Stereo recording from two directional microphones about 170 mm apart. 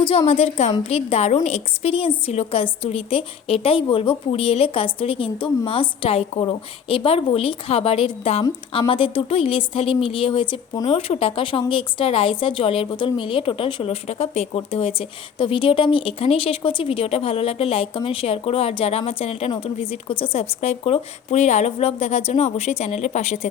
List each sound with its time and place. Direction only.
0.0 s a woman's voice: 35° left (ahead or behind)